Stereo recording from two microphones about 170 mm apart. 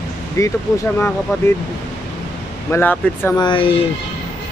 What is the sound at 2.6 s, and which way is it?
Speech, 10° left (ahead or behind).